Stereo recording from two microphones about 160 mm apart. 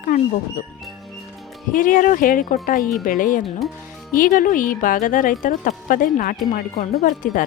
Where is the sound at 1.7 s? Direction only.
55° left (ahead or behind).